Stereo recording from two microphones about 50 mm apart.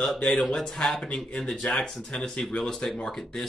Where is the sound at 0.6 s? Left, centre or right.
Centre.